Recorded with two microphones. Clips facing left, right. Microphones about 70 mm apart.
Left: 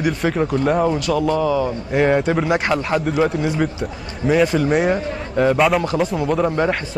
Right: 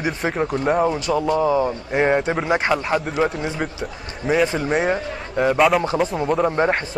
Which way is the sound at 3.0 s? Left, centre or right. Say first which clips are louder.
Left 3 dB; centre.